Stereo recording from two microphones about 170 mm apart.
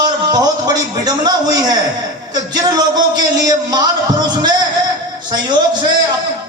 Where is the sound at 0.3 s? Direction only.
25° right (ahead or behind).